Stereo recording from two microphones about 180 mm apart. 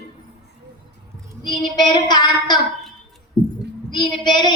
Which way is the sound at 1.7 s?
25° left (ahead or behind).